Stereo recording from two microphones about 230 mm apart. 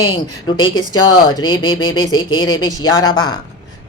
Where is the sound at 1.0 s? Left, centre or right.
Centre.